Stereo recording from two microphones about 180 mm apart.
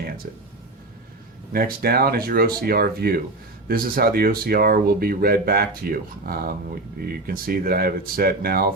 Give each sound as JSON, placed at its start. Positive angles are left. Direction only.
{"t": 1.5, "sound": "speech", "side_deg": -55}